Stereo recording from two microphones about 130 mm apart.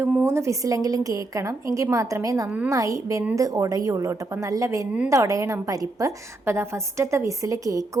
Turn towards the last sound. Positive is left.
turn(degrees=-25)  # may be behind; listen again after turning